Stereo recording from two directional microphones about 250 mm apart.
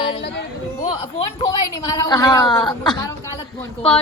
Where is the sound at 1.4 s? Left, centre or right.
Centre.